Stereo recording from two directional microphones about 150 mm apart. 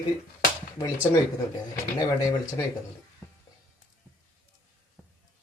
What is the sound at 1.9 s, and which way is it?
Speech, 20° left (ahead or behind).